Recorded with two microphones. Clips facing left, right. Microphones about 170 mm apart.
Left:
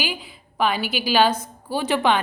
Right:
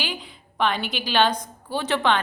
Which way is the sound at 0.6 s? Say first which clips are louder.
Left 2 dB; 5° left (ahead or behind).